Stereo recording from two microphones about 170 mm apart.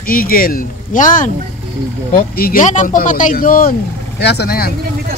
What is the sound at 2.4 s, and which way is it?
Speech, 55° left (ahead or behind).